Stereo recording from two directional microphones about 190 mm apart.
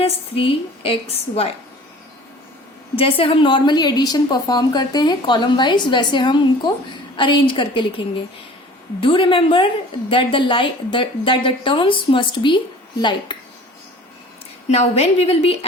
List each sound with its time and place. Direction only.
0.0 s a woman's voice: 30° left (ahead or behind)
2.9 s a woman's voice: 30° left (ahead or behind)
14.7 s a woman's voice: 35° left (ahead or behind)